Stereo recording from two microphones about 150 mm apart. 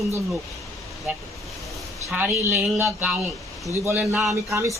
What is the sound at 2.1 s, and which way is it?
Speech, 10° right (ahead or behind).